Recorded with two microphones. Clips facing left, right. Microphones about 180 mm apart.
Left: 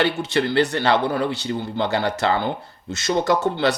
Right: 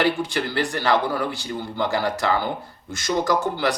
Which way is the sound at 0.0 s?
25° left (ahead or behind).